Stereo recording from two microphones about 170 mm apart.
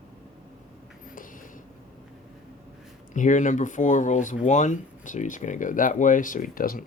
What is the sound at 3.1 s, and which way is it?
Speech, 50° left (ahead or behind).